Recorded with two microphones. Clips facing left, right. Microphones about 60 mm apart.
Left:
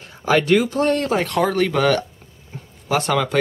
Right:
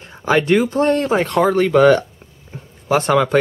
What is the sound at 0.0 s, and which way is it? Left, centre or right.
Speech, right.